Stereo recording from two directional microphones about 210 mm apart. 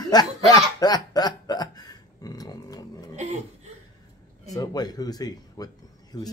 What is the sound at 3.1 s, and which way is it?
Chuckle, 35° right (ahead or behind).